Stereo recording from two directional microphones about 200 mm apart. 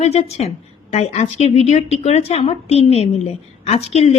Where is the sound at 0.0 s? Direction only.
30° left (ahead or behind).